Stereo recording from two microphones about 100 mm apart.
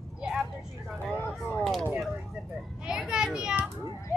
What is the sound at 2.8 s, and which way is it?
Children playing, 5° right (ahead or behind).